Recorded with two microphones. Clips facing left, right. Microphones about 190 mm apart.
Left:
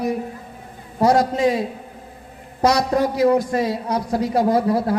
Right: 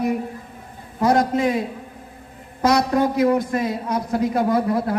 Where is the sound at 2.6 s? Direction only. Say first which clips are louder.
Even; 30° left (ahead or behind).